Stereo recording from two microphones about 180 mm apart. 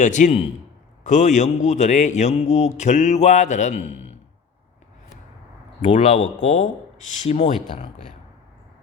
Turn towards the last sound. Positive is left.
turn(degrees=35)  # may be behind; listen again after turning